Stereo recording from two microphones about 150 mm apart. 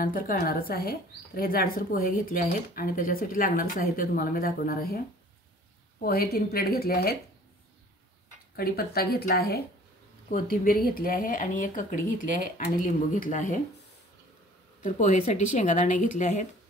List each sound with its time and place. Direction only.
0.0 s speech: 75° left (ahead or behind); by 7.2 s 90° left
8.5 s speech: 85° left
10.3 s speech: 75° left (ahead or behind)
15.0 s speech: 50° left (ahead or behind)